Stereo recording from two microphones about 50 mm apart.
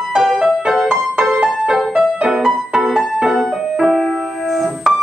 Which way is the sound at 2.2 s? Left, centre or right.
Centre.